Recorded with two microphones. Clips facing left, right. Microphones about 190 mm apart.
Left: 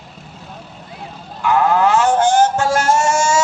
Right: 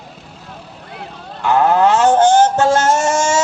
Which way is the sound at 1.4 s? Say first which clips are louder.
Right 2 dB; 30° right (ahead or behind).